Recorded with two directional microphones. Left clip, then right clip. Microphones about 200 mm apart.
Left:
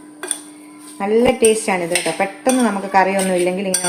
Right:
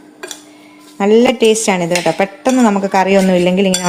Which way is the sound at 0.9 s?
50° right (ahead or behind).